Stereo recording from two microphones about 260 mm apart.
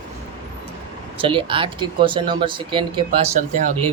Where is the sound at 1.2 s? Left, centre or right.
Centre.